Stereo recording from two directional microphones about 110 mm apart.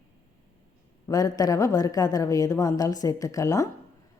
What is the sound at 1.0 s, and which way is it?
A woman's voice, 35° left (ahead or behind).